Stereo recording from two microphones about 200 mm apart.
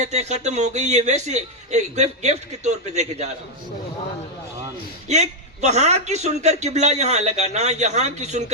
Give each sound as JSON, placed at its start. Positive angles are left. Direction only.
{"t": 0.0, "sound": "a man's voice", "side_deg": -35}
{"t": 5.0, "sound": "a man's voice", "side_deg": -35}